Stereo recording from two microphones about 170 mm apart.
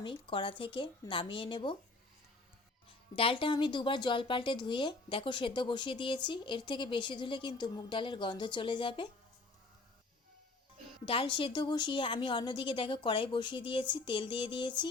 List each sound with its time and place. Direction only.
0.0 s a woman's voice: 30° left (ahead or behind)
3.2 s a woman's voice: 30° left (ahead or behind)
11.0 s a woman's voice: 30° left (ahead or behind)